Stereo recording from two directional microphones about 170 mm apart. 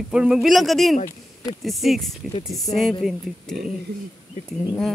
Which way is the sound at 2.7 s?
35° left (ahead or behind).